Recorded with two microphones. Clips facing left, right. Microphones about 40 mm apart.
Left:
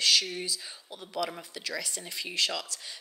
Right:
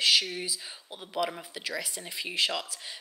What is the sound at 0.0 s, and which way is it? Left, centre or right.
Speech, centre.